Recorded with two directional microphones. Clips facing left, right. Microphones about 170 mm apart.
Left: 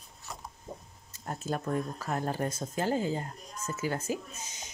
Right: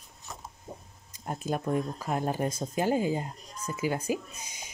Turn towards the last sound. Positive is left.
turn(degrees=-10)  # may be behind; listen again after turning